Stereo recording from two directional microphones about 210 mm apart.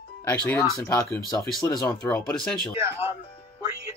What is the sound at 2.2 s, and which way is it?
Speech, 5° left (ahead or behind).